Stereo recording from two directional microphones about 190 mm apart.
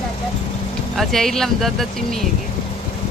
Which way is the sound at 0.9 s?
Centre (ahead or behind).